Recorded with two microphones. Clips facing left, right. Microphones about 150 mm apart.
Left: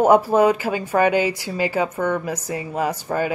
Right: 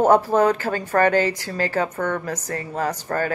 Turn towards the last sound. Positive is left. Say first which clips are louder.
# left 1 dB
turn(degrees=10)  # may be behind; listen again after turning